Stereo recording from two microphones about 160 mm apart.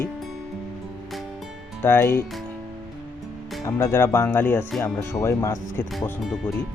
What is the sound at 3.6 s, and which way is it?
Speech, 15° left (ahead or behind).